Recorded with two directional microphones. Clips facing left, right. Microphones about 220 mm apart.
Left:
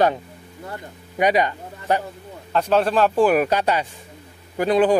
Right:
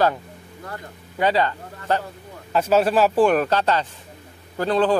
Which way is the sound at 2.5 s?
5° right (ahead or behind).